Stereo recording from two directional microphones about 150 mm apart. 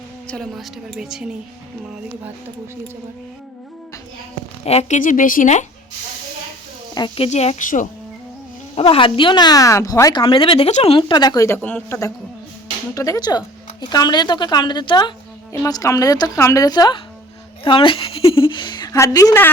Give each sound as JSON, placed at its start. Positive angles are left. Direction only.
{"t": 0.3, "sound": "a woman's voice", "side_deg": 0}
{"t": 4.6, "sound": "speech", "side_deg": 45}
{"t": 6.9, "sound": "a woman's voice", "side_deg": 30}
{"t": 7.3, "sound": "speech", "side_deg": 45}
{"t": 8.7, "sound": "speech", "side_deg": 40}
{"t": 10.7, "sound": "speech", "side_deg": 50}
{"t": 10.9, "sound": "a woman's voice", "side_deg": 30}